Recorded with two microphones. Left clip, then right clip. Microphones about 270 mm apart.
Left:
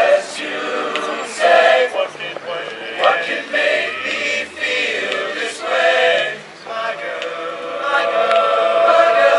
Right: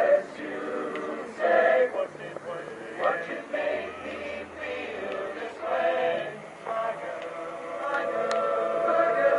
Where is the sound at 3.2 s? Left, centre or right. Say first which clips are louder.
Left 12 dB; centre.